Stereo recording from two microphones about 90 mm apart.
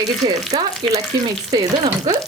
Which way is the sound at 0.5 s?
90° right.